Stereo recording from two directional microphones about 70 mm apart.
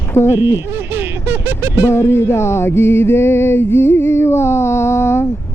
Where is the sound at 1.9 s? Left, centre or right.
Left.